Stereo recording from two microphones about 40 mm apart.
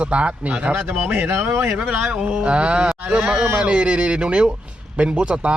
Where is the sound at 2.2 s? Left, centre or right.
Centre.